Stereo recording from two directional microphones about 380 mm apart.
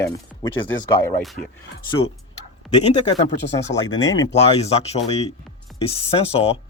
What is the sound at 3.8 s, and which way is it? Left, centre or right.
Speech, centre.